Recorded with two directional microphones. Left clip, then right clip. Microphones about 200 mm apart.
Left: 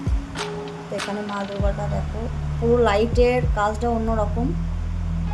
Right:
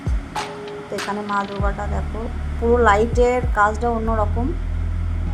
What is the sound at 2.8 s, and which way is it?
A woman's voice, centre (ahead or behind).